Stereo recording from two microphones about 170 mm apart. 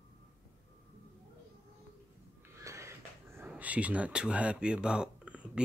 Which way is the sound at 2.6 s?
15° right (ahead or behind).